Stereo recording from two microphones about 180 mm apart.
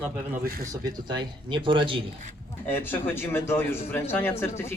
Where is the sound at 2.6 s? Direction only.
10° left (ahead or behind).